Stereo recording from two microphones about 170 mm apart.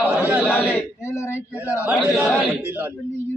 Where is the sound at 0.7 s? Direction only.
15° left (ahead or behind).